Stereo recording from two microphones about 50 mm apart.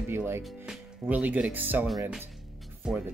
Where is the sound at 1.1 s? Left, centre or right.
Right.